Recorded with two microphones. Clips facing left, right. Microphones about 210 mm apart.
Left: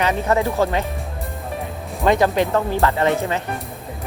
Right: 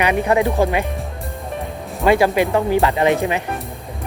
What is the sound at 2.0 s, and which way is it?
Speech, 10° right (ahead or behind).